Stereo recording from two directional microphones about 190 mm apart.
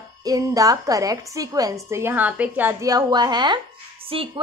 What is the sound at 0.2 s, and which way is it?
Speech, 20° right (ahead or behind).